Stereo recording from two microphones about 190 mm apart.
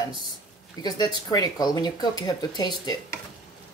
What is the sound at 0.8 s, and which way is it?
Speech, 20° left (ahead or behind).